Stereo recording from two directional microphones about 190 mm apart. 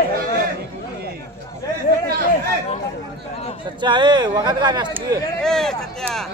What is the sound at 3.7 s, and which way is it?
Speech, 25° right (ahead or behind).